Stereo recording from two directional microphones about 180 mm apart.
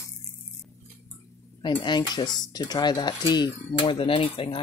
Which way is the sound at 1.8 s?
25° left (ahead or behind).